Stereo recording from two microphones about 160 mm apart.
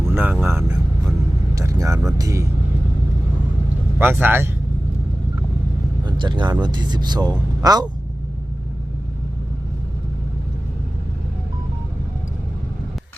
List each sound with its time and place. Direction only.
0.1 s speech: 15° right (ahead or behind)
0.4 s vehicle: 15° right (ahead or behind)
2.1 s speech: 20° right (ahead or behind)
3.9 s speech: 15° right (ahead or behind)
6.1 s speech: 30° right (ahead or behind)